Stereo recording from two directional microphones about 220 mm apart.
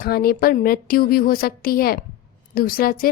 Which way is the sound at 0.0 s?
45° left (ahead or behind).